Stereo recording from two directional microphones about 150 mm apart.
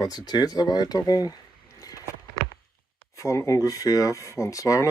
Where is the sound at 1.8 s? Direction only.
25° left (ahead or behind).